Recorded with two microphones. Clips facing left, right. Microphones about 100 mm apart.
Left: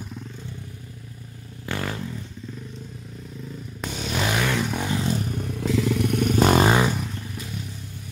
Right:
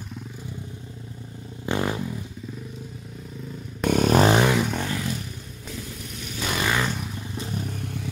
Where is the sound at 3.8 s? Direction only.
50° right (ahead or behind).